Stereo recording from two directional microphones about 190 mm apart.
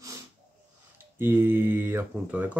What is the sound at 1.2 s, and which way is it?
Speech, 10° right (ahead or behind).